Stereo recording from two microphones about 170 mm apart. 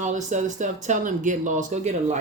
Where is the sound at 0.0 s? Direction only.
45° right (ahead or behind).